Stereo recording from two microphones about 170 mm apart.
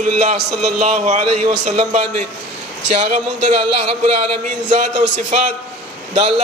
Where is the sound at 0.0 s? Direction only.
45° right (ahead or behind).